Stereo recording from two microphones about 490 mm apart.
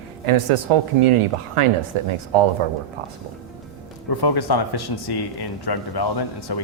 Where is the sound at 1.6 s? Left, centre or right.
Right.